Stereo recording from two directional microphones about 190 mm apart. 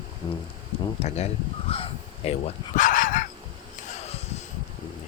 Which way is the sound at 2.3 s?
40° left (ahead or behind).